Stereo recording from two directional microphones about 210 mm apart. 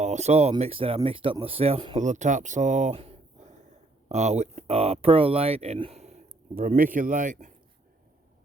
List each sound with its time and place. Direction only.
0.0 s speech: 35° right (ahead or behind)